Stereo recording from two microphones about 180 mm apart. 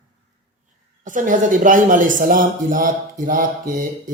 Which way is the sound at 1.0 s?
45° right (ahead or behind).